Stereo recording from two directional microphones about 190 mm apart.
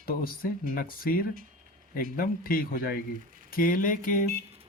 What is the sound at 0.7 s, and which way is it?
Speech, 50° left (ahead or behind).